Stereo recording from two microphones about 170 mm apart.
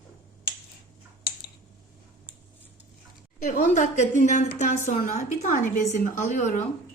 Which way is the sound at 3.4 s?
45° left (ahead or behind).